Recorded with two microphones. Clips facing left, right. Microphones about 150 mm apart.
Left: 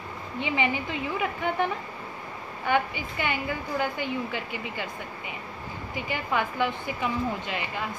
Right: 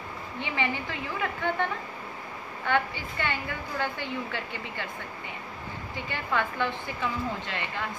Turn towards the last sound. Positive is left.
turn(degrees=15)  # may be behind; listen again after turning